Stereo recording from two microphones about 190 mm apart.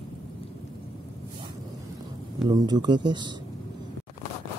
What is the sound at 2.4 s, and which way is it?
Speech, 20° right (ahead or behind).